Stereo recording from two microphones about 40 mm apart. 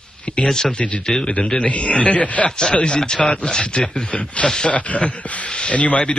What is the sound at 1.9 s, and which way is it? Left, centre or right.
A man's voice, left.